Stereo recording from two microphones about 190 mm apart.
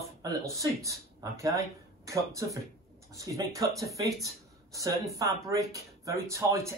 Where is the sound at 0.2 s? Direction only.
15° right (ahead or behind).